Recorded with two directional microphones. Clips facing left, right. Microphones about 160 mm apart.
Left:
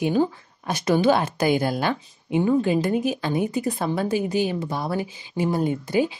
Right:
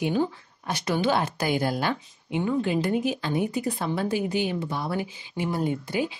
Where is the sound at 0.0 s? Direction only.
45° left (ahead or behind).